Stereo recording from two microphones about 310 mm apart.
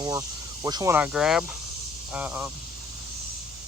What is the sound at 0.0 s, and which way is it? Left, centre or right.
Speech, centre.